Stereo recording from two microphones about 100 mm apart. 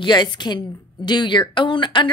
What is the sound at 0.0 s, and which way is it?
Speech, 50° left (ahead or behind).